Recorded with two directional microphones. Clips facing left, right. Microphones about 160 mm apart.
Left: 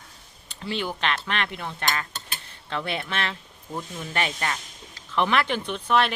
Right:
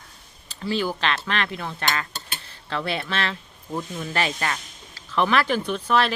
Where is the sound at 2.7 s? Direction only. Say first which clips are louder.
Right 2 dB; 20° left (ahead or behind).